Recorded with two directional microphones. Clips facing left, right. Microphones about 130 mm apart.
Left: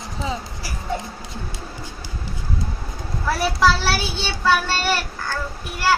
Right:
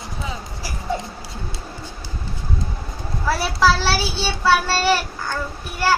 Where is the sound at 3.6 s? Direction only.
5° right (ahead or behind).